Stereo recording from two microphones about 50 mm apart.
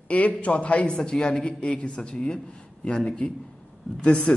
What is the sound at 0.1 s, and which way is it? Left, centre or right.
A man's voice, left.